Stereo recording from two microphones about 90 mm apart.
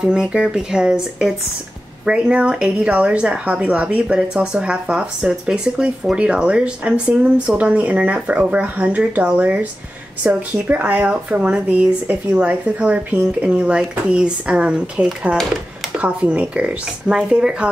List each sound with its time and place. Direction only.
0.0 s a woman's voice: 10° right (ahead or behind)